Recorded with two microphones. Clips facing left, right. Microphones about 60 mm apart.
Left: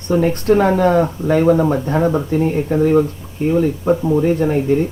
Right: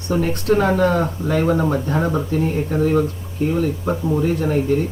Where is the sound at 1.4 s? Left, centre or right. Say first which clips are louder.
Left 5 dB; centre.